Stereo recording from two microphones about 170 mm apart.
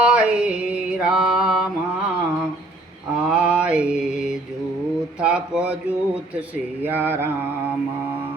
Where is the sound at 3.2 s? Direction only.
5° right (ahead or behind).